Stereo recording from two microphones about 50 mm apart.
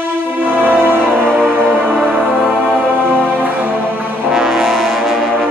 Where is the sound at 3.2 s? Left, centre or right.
Right.